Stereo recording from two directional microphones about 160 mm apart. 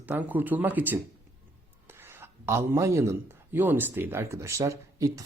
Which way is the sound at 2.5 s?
15° right (ahead or behind).